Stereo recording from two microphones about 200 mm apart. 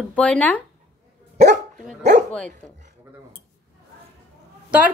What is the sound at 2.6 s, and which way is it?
Speech, 5° left (ahead or behind).